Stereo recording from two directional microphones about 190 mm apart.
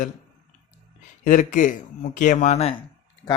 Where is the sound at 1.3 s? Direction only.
40° left (ahead or behind).